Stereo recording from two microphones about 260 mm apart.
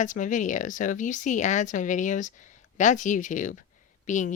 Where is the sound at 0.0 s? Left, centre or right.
Left.